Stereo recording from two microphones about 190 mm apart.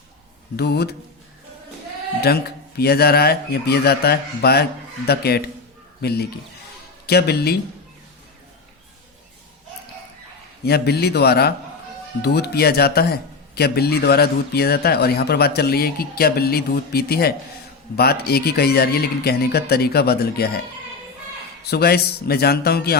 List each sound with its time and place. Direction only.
0.5 s speech: 60° left (ahead or behind)
2.2 s a man's voice: 55° left (ahead or behind)
10.7 s speech: 55° left (ahead or behind)
21.7 s speech: 55° left (ahead or behind)